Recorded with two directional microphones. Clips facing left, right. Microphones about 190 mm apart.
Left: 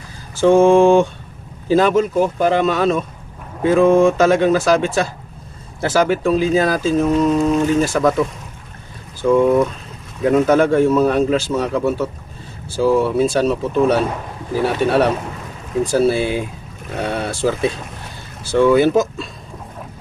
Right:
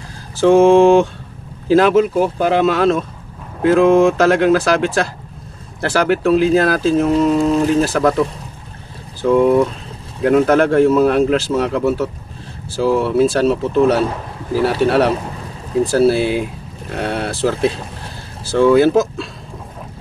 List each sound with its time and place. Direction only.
0.4 s a man's voice: centre (ahead or behind)
7.5 s speech: 35° right (ahead or behind)
7.8 s a man's voice: centre (ahead or behind)